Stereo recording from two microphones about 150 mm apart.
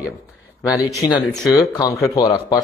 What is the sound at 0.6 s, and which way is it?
Speech, 20° left (ahead or behind).